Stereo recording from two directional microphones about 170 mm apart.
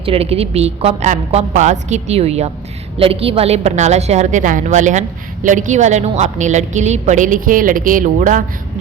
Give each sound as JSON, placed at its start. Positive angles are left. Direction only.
{"t": 0.0, "sound": "a woman's voice", "side_deg": -35}